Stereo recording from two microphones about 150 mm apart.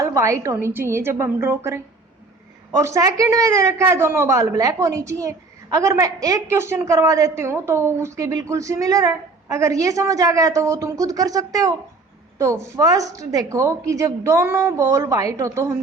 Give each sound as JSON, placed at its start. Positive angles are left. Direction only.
{"t": 0.0, "sound": "a woman's voice", "side_deg": -20}